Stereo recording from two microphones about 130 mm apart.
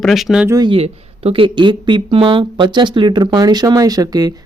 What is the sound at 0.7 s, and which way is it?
Speech, 45° right (ahead or behind).